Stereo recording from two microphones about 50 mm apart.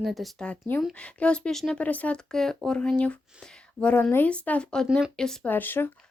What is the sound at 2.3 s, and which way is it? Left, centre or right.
Speech, centre.